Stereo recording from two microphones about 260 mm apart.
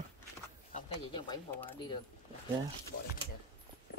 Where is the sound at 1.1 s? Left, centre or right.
Centre.